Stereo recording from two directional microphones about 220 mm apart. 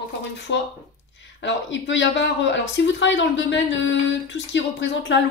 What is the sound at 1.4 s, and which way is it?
A man's voice, 55° left (ahead or behind).